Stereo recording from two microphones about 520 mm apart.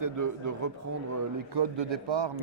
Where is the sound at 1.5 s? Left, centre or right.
Right.